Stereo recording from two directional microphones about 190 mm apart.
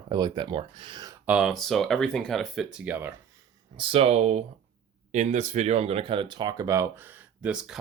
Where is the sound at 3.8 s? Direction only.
30° right (ahead or behind).